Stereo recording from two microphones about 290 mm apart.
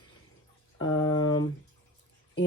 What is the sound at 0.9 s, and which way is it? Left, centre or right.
Speech, left.